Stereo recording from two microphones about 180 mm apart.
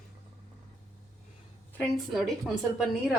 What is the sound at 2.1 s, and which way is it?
A woman's voice, centre (ahead or behind).